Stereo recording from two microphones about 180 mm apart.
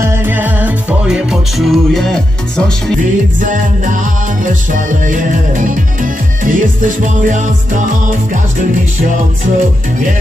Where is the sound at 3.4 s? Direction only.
45° right (ahead or behind).